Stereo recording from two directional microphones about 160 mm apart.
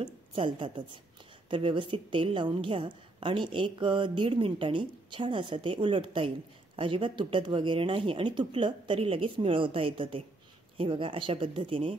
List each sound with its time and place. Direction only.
0.4 s a woman's voice: 30° right (ahead or behind)